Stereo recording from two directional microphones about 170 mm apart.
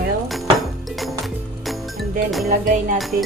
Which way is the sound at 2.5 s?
50° right (ahead or behind).